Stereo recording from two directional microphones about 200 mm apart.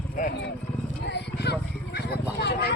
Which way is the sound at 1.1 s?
55° left (ahead or behind).